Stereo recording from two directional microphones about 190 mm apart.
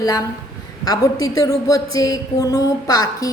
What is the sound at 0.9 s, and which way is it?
A woman's voice, 20° left (ahead or behind).